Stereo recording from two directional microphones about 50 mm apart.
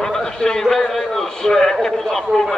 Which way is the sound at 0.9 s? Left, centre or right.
Centre.